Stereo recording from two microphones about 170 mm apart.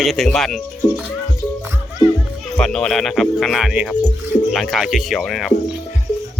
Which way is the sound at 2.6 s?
5° left (ahead or behind).